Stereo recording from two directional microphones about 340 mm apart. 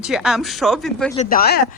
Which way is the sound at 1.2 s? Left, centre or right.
Left.